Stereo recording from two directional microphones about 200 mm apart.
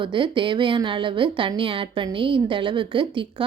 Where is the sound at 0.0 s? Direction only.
25° right (ahead or behind).